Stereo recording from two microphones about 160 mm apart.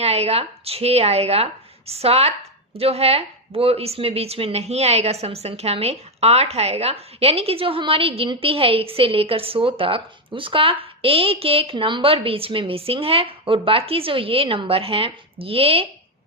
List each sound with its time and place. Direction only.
0.0 s speech: 40° right (ahead or behind)